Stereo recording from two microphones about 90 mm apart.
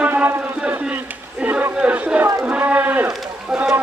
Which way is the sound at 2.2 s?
20° right (ahead or behind).